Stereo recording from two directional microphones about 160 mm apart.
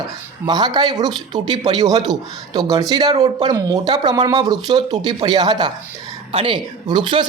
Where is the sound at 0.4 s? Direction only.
25° right (ahead or behind).